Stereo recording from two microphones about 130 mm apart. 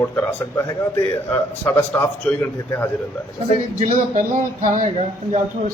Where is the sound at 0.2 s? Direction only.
15° left (ahead or behind).